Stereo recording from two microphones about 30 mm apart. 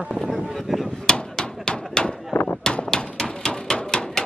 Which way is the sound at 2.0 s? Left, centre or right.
Left.